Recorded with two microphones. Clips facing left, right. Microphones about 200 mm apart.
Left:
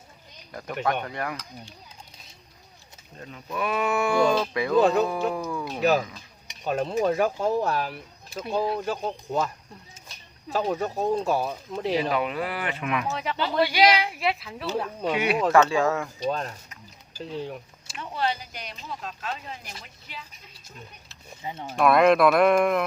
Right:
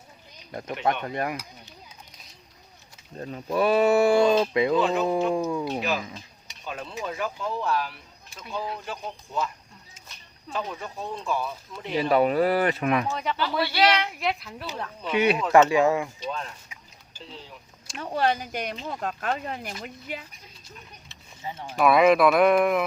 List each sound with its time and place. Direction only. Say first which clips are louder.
1.0 s speech: right 3 dB; 20° right (ahead or behind)
3.2 s speech: right 6 dB; 35° right (ahead or behind)
5.8 s speech: left 6 dB; 40° left (ahead or behind)
10.5 s speech: left 7 dB; 40° left (ahead or behind)
12.1 s speech: right 7 dB; 40° right (ahead or behind)
13.1 s speech: right 1 dB; centre (ahead or behind)
13.3 s speech: left 5 dB; 20° left (ahead or behind); by 14.7 s centre (ahead or behind)
15.5 s speech: right 4 dB; 15° right (ahead or behind)
16.2 s speech: left 5 dB; 40° left (ahead or behind)
17.3 s speech: left 13 dB; 60° left (ahead or behind)
17.9 s speech: right 4 dB; 45° right (ahead or behind)
21.8 s speech: even; centre (ahead or behind)